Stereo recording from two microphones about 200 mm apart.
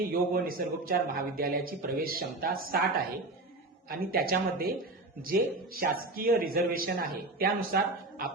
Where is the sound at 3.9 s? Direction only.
45° right (ahead or behind).